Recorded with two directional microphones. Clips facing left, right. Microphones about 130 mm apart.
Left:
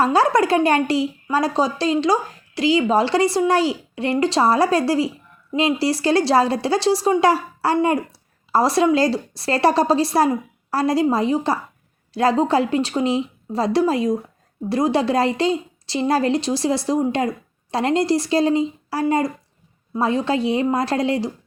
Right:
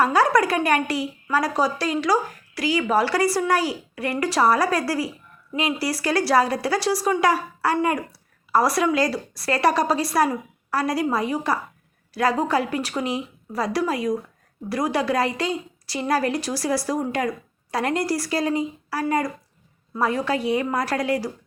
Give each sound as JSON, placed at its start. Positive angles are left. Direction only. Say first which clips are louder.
{"t": 0.0, "sound": "speech", "louder": "left 2 dB", "side_deg": 25}